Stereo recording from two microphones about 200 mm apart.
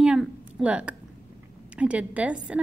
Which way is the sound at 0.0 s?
5° right (ahead or behind).